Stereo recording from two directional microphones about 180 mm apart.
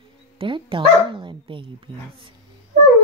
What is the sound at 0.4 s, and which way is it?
Speech, 30° right (ahead or behind).